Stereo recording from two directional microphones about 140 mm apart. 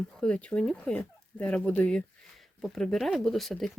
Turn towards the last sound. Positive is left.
turn(degrees=0)  # may be behind; listen again after turning